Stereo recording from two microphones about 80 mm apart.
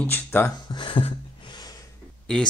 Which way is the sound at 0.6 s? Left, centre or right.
Left.